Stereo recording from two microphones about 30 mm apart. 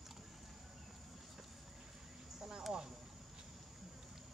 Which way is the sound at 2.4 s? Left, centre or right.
Right.